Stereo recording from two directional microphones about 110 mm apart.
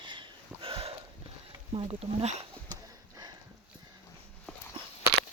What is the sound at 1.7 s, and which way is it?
Speech, 55° right (ahead or behind).